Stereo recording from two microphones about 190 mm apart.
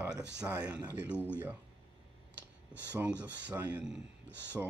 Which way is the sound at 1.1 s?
10° left (ahead or behind).